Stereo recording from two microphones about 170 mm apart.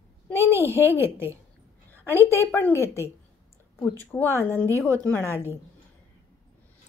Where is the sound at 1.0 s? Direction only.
15° right (ahead or behind).